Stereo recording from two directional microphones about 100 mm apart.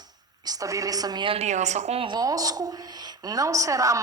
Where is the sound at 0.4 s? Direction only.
40° right (ahead or behind).